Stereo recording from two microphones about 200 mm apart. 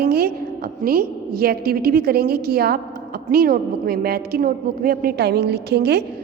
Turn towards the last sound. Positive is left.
turn(degrees=-55)  # may be behind; listen again after turning